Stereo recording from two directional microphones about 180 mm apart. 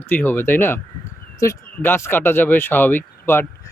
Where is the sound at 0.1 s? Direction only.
10° left (ahead or behind).